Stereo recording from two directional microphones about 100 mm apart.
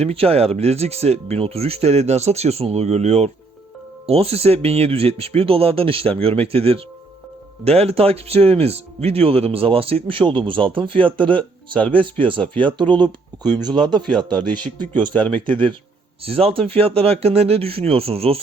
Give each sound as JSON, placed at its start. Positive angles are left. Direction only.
{"t": 0.0, "sound": "speech", "side_deg": -80}
{"t": 7.6, "sound": "speech", "side_deg": -90}
{"t": 11.7, "sound": "speech", "side_deg": 15}
{"t": 12.5, "sound": "speech", "side_deg": -55}
{"t": 14.0, "sound": "speech", "side_deg": 10}
{"t": 16.2, "sound": "speech", "side_deg": -75}